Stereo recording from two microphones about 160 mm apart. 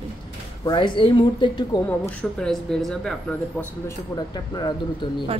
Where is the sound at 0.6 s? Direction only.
30° left (ahead or behind).